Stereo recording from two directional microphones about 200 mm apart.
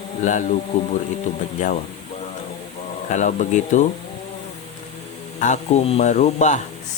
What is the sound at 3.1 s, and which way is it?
Speech, 40° left (ahead or behind).